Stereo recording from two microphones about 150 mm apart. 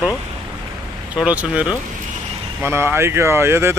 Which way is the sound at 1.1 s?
10° right (ahead or behind).